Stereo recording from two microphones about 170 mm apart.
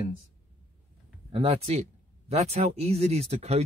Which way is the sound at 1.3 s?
35° right (ahead or behind).